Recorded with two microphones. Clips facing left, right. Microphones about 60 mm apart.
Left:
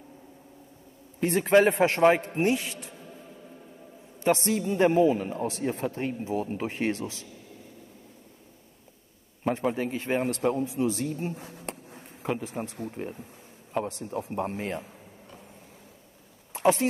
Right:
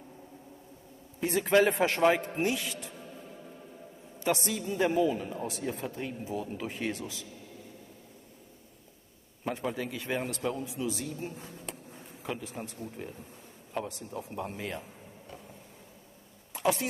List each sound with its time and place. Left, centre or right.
1.3 s a man's voice: left
4.3 s a man's voice: left
9.4 s a man's voice: left
12.9 s a man's voice: left
13.7 s a man's voice: centre
14.3 s a man's voice: left
16.5 s a sound: left